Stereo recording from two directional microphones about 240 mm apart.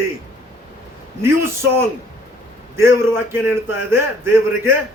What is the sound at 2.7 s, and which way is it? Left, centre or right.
A man's voice, centre.